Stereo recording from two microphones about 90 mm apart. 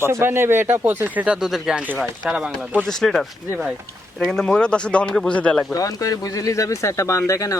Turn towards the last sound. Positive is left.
turn(degrees=35)  # may be behind; listen again after turning